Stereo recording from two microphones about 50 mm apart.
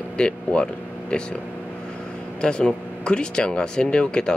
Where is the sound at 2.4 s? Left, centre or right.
Centre.